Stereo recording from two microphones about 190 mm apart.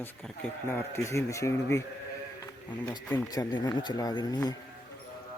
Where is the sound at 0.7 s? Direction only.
15° left (ahead or behind).